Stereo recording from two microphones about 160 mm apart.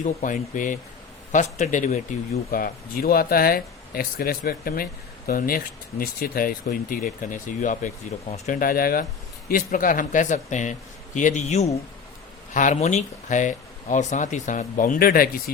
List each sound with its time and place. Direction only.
0.0 s speech: 55° left (ahead or behind)
2.5 s speech: 65° left (ahead or behind)